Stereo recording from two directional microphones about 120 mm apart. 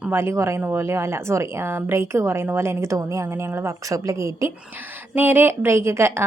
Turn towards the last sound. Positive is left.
turn(degrees=-20)  # may be behind; listen again after turning